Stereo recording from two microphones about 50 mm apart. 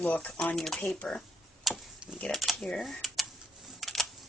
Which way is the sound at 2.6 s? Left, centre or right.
Centre.